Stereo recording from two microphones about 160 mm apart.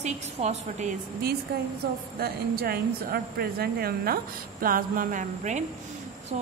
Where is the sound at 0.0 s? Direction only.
45° right (ahead or behind).